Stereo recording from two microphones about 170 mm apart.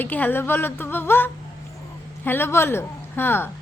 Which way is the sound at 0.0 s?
10° left (ahead or behind).